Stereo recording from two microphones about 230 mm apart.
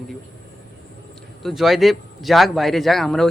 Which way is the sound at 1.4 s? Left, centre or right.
Centre.